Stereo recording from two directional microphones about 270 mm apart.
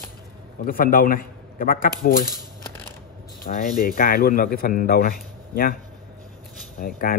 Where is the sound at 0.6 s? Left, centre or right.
Left.